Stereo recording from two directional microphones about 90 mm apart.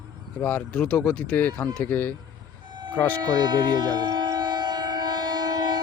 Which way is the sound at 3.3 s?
55° right (ahead or behind).